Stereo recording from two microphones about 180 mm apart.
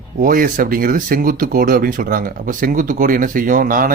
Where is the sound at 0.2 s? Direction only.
50° right (ahead or behind).